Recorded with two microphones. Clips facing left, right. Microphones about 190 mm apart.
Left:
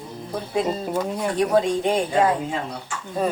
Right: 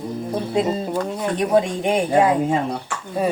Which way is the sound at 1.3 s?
20° right (ahead or behind).